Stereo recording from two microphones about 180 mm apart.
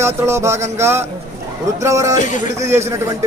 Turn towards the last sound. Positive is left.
turn(degrees=-15)  # may be behind; listen again after turning